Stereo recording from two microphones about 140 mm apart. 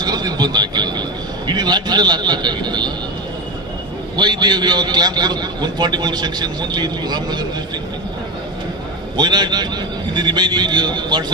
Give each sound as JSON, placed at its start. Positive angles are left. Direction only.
{"t": 0.0, "sound": "a sound", "side_deg": -30}
{"t": 1.5, "sound": "a man's voice", "side_deg": -30}
{"t": 4.2, "sound": "a man's voice", "side_deg": -30}
{"t": 9.1, "sound": "a man's voice", "side_deg": -30}